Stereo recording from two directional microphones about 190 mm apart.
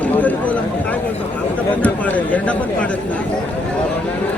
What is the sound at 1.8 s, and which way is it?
Speech, 10° left (ahead or behind).